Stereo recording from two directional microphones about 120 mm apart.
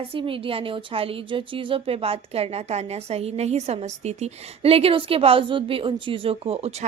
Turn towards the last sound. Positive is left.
turn(degrees=-60)  # may be behind; listen again after turning